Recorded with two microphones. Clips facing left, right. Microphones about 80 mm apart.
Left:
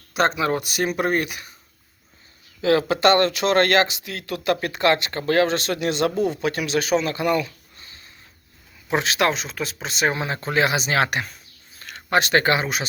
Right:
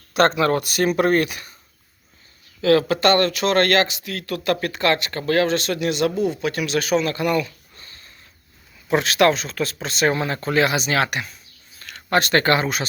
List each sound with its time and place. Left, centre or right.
0.1 s speech: centre
2.6 s speech: left
11.8 s speech: left